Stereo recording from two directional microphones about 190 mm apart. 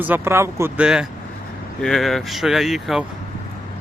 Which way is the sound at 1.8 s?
Centre (ahead or behind).